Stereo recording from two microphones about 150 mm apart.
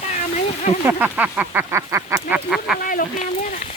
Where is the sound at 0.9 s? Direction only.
10° right (ahead or behind).